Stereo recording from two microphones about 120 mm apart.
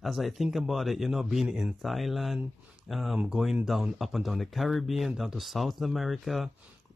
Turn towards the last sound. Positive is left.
turn(degrees=0)  # may be behind; listen again after turning